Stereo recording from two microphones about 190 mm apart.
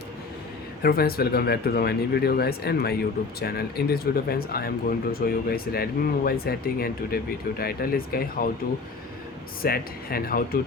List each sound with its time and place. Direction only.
0.8 s speech: 55° left (ahead or behind)
9.6 s speech: 50° left (ahead or behind)